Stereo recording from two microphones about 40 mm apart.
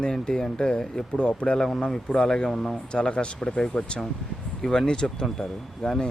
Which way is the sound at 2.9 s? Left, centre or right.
Left.